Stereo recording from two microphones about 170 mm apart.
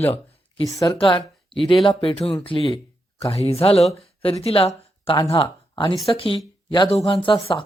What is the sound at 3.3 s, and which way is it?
Speech, 35° left (ahead or behind).